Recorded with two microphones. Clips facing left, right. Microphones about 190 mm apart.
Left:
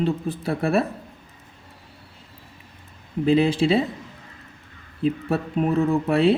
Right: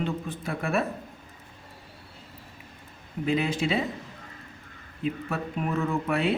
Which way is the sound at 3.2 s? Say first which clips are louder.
Left 8 dB; 30° left (ahead or behind).